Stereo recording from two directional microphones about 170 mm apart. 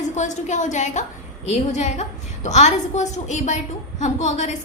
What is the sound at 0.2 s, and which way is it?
A woman's voice, 45° left (ahead or behind).